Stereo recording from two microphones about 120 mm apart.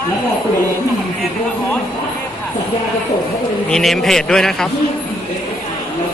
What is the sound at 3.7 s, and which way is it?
Speech, centre (ahead or behind).